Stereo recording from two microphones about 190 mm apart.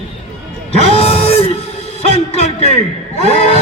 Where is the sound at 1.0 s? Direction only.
30° left (ahead or behind).